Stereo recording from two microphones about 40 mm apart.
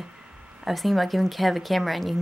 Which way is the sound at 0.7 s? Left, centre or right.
Centre.